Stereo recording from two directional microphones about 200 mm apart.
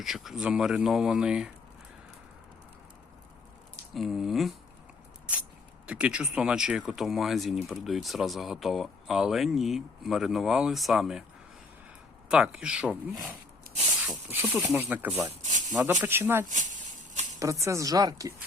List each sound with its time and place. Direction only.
0.0 s speech: centre (ahead or behind)
3.9 s speech: centre (ahead or behind)
5.8 s speech: 5° right (ahead or behind)
12.3 s speech: 5° right (ahead or behind)
13.7 s spray: 45° right (ahead or behind)
14.1 s a woman's voice: 10° right (ahead or behind)